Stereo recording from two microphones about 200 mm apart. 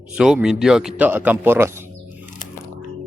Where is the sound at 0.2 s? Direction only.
5° right (ahead or behind).